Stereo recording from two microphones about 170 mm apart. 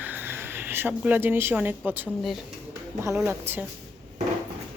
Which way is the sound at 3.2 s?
15° right (ahead or behind).